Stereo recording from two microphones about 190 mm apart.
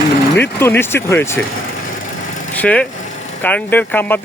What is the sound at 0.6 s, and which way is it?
Speech, 10° left (ahead or behind).